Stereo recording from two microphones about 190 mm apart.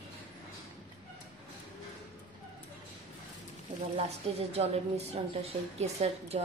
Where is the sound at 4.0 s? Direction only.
30° right (ahead or behind).